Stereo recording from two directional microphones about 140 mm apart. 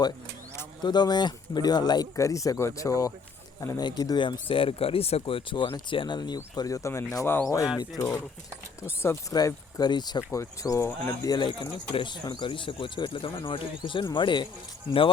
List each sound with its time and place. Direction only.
0.8 s speech: 30° left (ahead or behind)
11.3 s speech: 30° left (ahead or behind)